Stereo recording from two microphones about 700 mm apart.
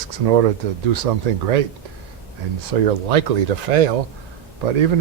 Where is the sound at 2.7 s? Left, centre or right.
Right.